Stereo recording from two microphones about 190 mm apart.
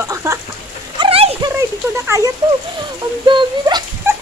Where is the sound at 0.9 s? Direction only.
25° right (ahead or behind).